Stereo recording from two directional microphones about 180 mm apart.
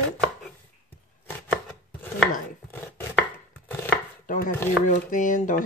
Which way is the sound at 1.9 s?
10° left (ahead or behind).